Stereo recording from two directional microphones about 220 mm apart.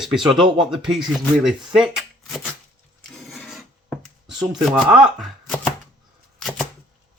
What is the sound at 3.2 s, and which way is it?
Filing, centre (ahead or behind).